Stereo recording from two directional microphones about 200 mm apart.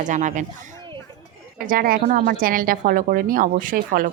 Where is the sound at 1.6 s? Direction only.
45° right (ahead or behind).